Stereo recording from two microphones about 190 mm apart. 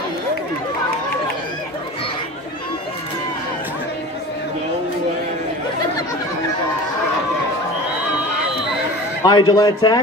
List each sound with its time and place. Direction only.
9.2 s a man's voice: 20° left (ahead or behind)